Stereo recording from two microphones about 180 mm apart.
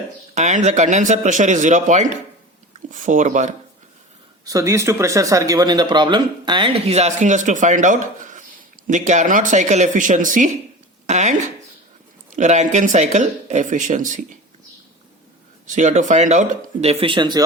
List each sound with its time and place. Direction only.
0.3 s speech: 40° right (ahead or behind)
4.4 s speech: 15° right (ahead or behind); by 11.3 s 40° right (ahead or behind)
12.4 s speech: 40° right (ahead or behind)
15.6 s speech: 45° right (ahead or behind); by 17.4 s 25° right (ahead or behind)